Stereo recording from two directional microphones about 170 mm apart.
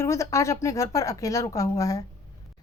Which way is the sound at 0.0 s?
15° left (ahead or behind).